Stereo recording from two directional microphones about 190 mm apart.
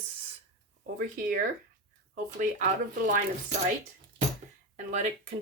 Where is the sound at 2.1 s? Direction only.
40° right (ahead or behind).